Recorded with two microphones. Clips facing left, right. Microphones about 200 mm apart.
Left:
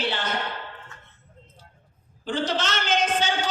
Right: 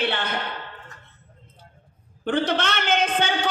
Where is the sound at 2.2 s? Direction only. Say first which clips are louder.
Right 3 dB; 60° right (ahead or behind).